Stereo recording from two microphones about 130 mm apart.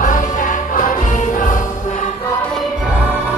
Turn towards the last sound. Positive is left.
turn(degrees=85)